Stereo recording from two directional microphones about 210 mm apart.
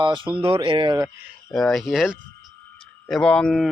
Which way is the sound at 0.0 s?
25° right (ahead or behind).